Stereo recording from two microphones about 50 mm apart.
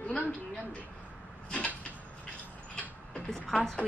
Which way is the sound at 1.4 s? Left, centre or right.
Left.